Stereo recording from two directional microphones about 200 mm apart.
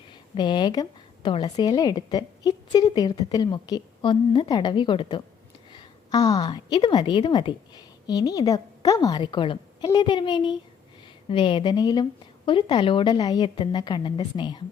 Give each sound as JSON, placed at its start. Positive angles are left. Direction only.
{"t": 0.3, "sound": "a woman's voice", "side_deg": 25}